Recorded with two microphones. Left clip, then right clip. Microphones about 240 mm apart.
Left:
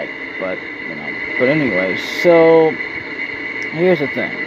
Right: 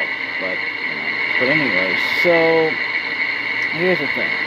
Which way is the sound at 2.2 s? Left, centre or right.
Left.